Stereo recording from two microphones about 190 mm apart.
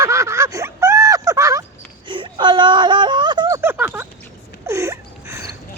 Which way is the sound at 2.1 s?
25° right (ahead or behind).